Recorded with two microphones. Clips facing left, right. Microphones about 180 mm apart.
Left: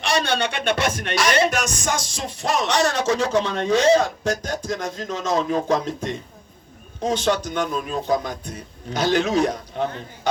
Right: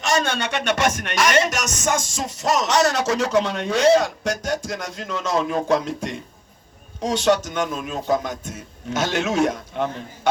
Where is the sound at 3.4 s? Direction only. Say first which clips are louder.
Even; 35° left (ahead or behind).